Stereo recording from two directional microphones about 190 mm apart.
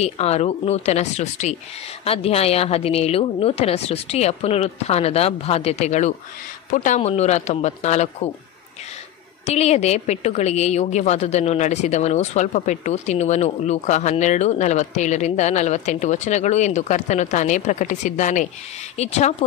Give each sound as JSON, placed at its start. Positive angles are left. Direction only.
{"t": 0.0, "sound": "a woman's voice", "side_deg": 35}
{"t": 9.5, "sound": "a woman's voice", "side_deg": 35}